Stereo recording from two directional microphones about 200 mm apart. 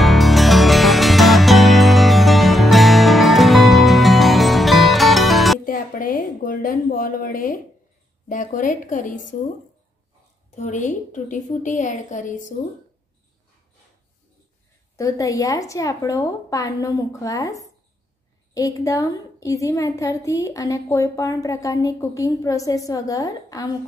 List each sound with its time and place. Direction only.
0.0 s music: centre (ahead or behind)
5.7 s a sound: 45° left (ahead or behind)
8.3 s a woman's voice: 40° left (ahead or behind)
10.5 s a woman's voice: 35° left (ahead or behind)
15.0 s a woman's voice: 15° left (ahead or behind)